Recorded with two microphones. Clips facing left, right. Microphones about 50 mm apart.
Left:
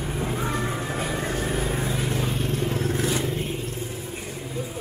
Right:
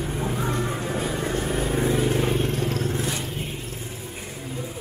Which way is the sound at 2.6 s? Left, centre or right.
Left.